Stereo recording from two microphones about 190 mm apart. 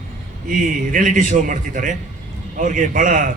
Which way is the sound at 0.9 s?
45° right (ahead or behind).